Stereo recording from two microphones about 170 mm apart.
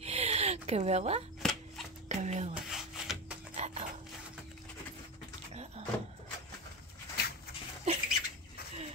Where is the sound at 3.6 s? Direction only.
40° right (ahead or behind).